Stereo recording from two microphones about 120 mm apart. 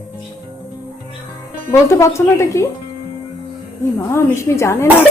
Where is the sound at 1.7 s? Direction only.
25° left (ahead or behind).